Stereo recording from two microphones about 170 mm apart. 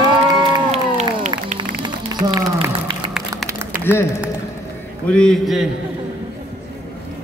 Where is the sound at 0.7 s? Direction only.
40° right (ahead or behind).